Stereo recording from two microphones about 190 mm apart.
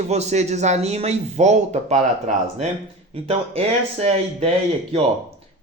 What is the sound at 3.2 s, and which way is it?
Speech, 30° right (ahead or behind).